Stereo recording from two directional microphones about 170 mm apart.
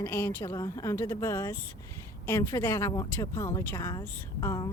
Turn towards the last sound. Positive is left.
turn(degrees=20)  # may be behind; listen again after turning